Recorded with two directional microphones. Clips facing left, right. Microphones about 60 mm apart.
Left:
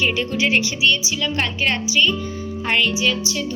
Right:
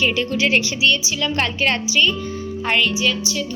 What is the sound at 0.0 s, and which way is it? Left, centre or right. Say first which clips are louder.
Speech: right 1 dB; centre.